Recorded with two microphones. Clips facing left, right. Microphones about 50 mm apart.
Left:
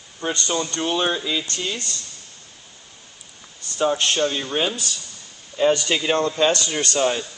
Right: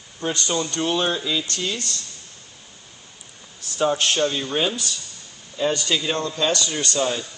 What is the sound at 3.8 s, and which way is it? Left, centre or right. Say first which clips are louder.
Speech: even; centre.